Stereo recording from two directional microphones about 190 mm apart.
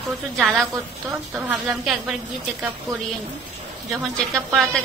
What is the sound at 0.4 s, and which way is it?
A woman's voice, centre (ahead or behind).